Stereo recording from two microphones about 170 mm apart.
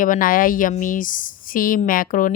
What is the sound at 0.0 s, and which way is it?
Speech, 55° left (ahead or behind).